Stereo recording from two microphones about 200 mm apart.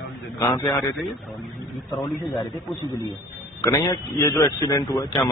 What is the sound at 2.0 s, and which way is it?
A man's voice, 15° left (ahead or behind).